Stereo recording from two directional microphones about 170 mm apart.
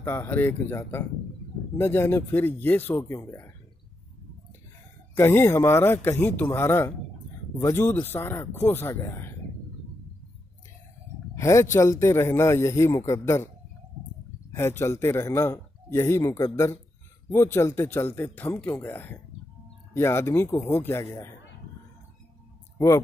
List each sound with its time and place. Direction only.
0.0 s a man's voice: 15° left (ahead or behind)
5.1 s a man's voice: 15° left (ahead or behind)
11.3 s a man's voice: 15° left (ahead or behind)
14.5 s a man's voice: 15° left (ahead or behind)